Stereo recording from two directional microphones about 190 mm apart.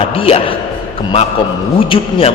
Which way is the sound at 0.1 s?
30° left (ahead or behind).